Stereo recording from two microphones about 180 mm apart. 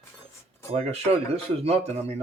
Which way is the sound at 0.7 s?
35° right (ahead or behind).